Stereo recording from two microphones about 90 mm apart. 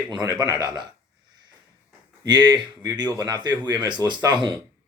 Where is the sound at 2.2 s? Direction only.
55° right (ahead or behind).